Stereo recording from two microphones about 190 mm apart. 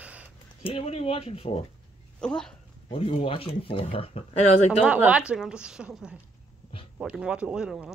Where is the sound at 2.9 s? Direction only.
30° left (ahead or behind).